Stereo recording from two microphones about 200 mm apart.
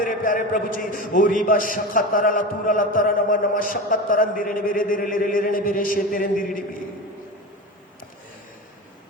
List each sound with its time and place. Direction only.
0.0 s a man's voice: 45° left (ahead or behind)